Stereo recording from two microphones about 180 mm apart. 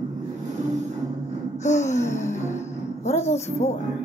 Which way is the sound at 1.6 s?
40° left (ahead or behind).